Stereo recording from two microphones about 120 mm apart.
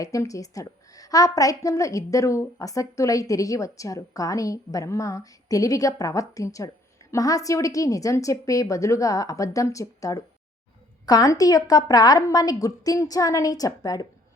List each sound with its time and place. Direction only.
0.0 s a woman's voice: 30° left (ahead or behind)